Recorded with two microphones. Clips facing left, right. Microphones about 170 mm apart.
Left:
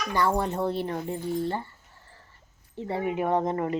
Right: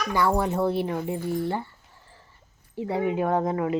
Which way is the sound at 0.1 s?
10° right (ahead or behind).